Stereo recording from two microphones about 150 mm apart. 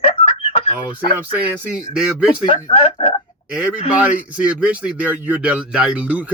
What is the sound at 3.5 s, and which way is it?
Speech, 5° right (ahead or behind).